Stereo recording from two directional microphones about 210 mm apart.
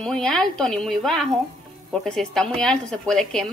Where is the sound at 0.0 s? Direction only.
5° left (ahead or behind).